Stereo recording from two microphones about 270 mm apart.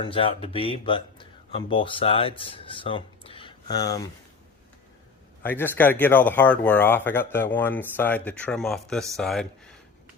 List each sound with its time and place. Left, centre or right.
0.0 s speech: centre
5.4 s speech: centre